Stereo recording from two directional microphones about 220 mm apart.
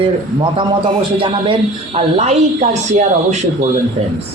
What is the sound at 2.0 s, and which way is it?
Speech, 30° right (ahead or behind).